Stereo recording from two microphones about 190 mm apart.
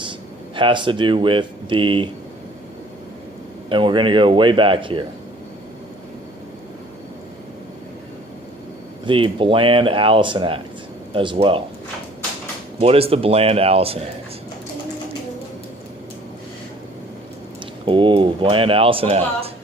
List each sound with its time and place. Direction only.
0.0 s speech: 25° right (ahead or behind)
3.7 s speech: 25° right (ahead or behind)
9.0 s speech: 25° right (ahead or behind)
12.8 s speech: 30° right (ahead or behind)
17.8 s speech: 25° right (ahead or behind)